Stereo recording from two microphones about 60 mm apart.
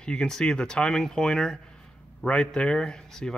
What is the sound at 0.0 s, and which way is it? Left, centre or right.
Speech, centre.